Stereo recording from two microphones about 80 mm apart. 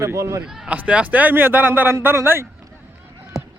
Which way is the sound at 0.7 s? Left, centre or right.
Centre.